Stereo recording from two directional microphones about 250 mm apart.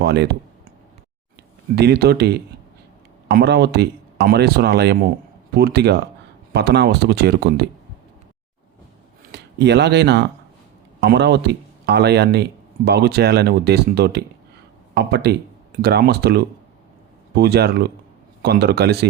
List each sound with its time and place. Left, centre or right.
0.0 s speech: right
1.7 s speech: right
9.3 s speech: right